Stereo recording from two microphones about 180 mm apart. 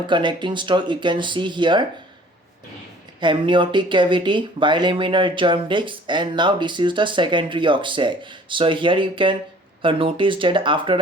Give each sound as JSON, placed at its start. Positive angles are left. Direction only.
{"t": 0.1, "sound": "speech", "side_deg": -25}
{"t": 3.2, "sound": "speech", "side_deg": -25}